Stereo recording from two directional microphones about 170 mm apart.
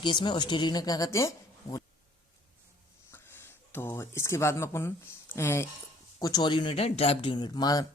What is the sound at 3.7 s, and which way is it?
Speech, 15° left (ahead or behind).